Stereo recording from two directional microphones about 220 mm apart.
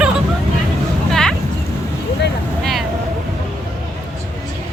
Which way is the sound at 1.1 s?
Centre (ahead or behind).